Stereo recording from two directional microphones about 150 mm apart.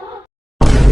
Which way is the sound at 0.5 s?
Centre (ahead or behind).